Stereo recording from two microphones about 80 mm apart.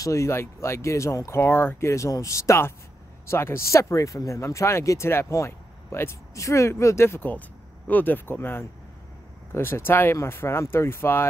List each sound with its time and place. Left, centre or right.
0.0 s speech: left
1.4 s speech: left